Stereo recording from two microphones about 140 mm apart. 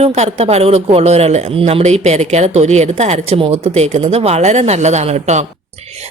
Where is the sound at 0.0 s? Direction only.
45° right (ahead or behind).